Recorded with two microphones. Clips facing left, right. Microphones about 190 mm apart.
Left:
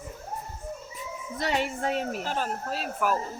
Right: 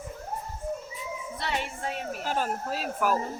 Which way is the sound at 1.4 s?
45° left (ahead or behind).